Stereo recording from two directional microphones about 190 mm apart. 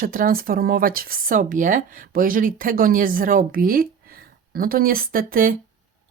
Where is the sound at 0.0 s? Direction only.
45° right (ahead or behind).